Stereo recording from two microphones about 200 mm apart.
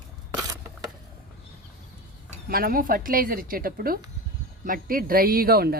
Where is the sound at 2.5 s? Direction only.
45° right (ahead or behind).